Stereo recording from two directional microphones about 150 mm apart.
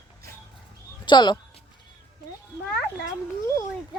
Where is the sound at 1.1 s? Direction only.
30° left (ahead or behind).